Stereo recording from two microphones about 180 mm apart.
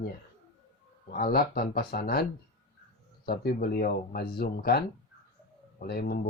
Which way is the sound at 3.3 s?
55° left (ahead or behind).